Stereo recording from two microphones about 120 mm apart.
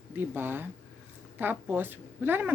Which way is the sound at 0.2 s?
15° right (ahead or behind).